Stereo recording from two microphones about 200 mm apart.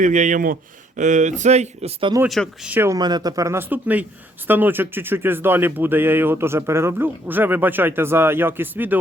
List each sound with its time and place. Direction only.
0.0 s speech: 40° right (ahead or behind)
2.2 s speech: 5° right (ahead or behind)